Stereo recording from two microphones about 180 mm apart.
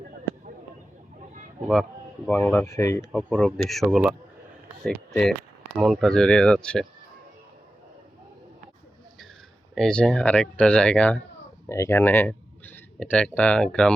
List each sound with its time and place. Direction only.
0.3 s a sound: 15° left (ahead or behind)
1.6 s speech: centre (ahead or behind)
2.3 s speech: 10° left (ahead or behind)
3.1 s speech: 5° left (ahead or behind)
9.7 s speech: 5° left (ahead or behind)